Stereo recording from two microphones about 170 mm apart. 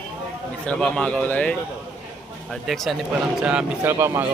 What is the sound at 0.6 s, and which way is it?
A man's voice, 5° left (ahead or behind).